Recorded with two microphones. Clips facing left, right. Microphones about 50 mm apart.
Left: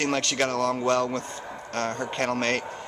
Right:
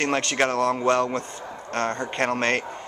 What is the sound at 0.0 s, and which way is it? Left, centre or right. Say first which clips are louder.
Speech: right 3 dB; right.